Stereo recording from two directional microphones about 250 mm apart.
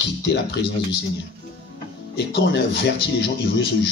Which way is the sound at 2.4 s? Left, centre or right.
Left.